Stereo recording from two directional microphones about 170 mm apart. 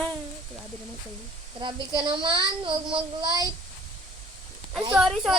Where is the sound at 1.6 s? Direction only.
30° right (ahead or behind).